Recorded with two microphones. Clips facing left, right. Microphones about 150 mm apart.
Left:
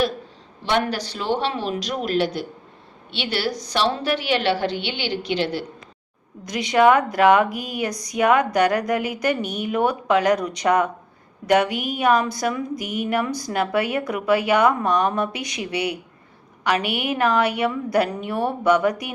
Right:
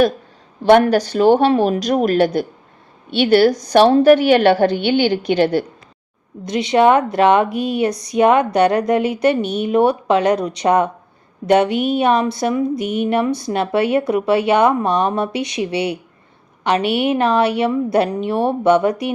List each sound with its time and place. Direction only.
0.6 s a woman's voice: 50° right (ahead or behind)
6.4 s speech: 25° right (ahead or behind)